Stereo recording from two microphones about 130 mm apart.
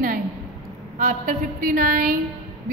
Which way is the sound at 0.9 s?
80° right.